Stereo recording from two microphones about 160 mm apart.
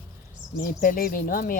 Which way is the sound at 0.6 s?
60° left (ahead or behind).